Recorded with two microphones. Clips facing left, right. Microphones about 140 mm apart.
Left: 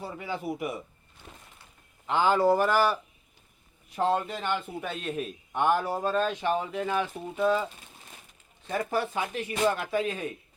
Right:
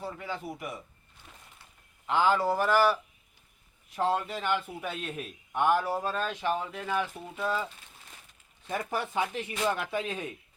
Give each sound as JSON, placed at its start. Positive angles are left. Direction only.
{"t": 0.0, "sound": "speech", "side_deg": 10}
{"t": 2.0, "sound": "a man's voice", "side_deg": 0}
{"t": 7.1, "sound": "speech", "side_deg": 20}
{"t": 8.6, "sound": "speech", "side_deg": -15}